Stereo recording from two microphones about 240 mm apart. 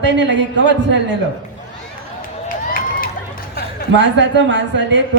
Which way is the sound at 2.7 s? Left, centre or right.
Left.